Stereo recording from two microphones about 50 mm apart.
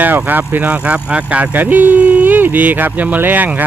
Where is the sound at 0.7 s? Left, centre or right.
Right.